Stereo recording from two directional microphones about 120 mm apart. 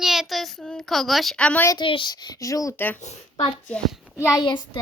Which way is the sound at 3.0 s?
65° left (ahead or behind).